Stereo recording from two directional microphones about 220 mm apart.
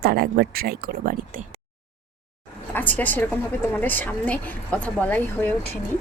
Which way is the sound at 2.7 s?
10° left (ahead or behind).